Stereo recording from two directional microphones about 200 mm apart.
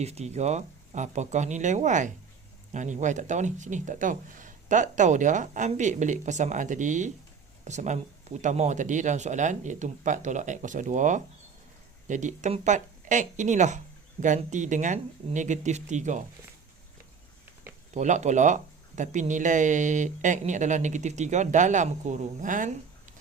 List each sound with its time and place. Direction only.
0.0 s speech: 30° right (ahead or behind)
17.9 s speech: 35° right (ahead or behind)